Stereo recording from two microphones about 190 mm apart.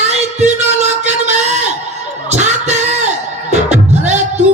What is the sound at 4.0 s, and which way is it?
Music, 35° right (ahead or behind).